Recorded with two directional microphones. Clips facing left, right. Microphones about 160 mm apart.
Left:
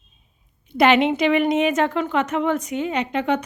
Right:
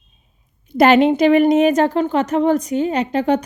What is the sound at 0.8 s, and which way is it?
A woman's voice, 40° right (ahead or behind).